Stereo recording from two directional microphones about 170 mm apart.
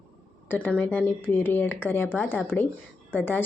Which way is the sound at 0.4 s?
10° left (ahead or behind).